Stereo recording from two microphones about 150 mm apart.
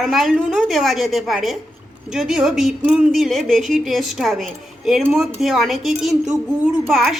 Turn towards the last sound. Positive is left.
turn(degrees=0)  # may be behind; listen again after turning